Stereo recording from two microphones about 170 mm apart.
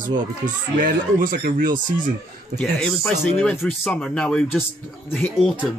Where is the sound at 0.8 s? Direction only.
55° right (ahead or behind).